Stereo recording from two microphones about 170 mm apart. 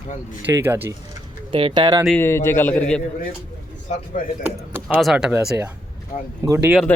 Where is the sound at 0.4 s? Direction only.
15° right (ahead or behind).